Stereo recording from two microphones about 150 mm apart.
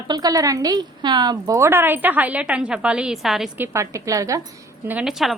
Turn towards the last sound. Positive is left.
turn(degrees=0)  # may be behind; listen again after turning